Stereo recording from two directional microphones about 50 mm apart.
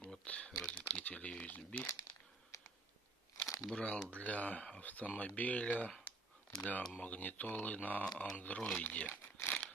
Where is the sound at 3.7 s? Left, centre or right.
Left.